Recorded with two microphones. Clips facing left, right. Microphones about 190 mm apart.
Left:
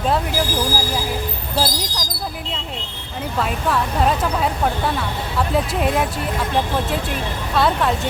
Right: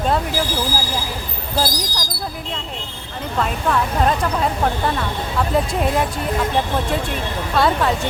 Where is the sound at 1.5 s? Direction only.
Centre (ahead or behind).